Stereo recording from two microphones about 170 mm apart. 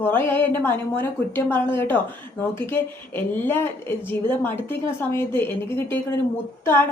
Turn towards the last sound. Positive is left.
turn(degrees=15)  # may be behind; listen again after turning